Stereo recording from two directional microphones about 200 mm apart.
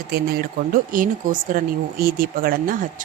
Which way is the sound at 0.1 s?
45° right (ahead or behind).